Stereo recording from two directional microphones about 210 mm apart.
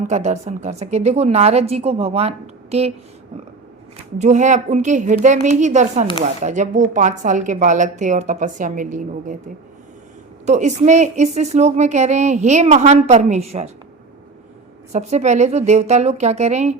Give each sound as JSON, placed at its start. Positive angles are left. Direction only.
{"t": 0.1, "sound": "a woman's voice", "side_deg": -35}
{"t": 4.2, "sound": "a woman's voice", "side_deg": -35}
{"t": 10.4, "sound": "a woman's voice", "side_deg": -35}
{"t": 14.9, "sound": "a woman's voice", "side_deg": -35}